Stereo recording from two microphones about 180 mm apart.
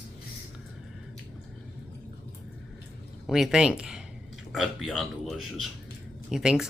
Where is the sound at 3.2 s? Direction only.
Centre (ahead or behind).